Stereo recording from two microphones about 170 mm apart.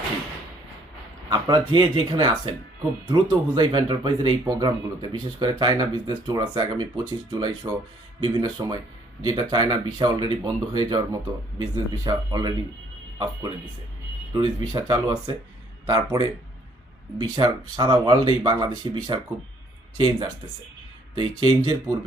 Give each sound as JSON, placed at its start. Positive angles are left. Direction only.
{"t": 1.3, "sound": "speech", "side_deg": -25}
{"t": 14.3, "sound": "speech", "side_deg": -25}
{"t": 21.2, "sound": "speech", "side_deg": -25}